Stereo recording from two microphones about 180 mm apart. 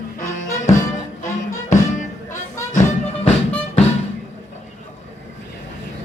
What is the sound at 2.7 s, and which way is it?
Music, 40° left (ahead or behind).